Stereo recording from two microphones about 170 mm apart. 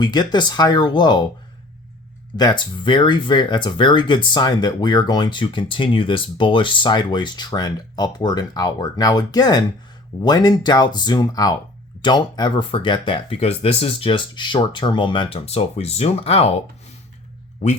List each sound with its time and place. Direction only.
0.0 s speech: 25° left (ahead or behind)
2.3 s speech: 25° left (ahead or behind)